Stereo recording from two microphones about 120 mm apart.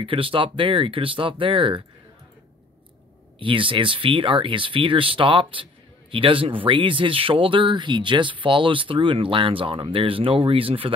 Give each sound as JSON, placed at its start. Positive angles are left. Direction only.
{"t": 0.0, "sound": "speech", "side_deg": -45}
{"t": 3.3, "sound": "speech", "side_deg": -45}